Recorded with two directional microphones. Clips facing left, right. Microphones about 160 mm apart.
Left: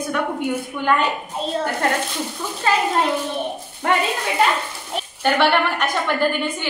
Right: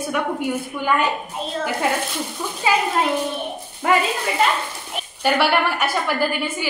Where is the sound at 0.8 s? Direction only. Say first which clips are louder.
Left 3 dB; 5° right (ahead or behind).